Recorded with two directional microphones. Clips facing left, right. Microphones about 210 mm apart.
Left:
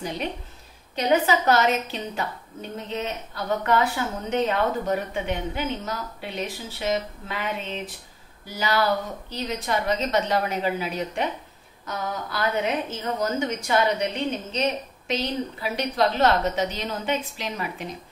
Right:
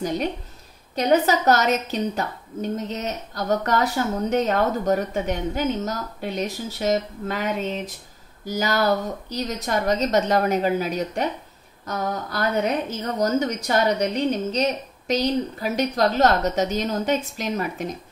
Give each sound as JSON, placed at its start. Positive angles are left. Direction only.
{"t": 0.9, "sound": "a woman's voice", "side_deg": -40}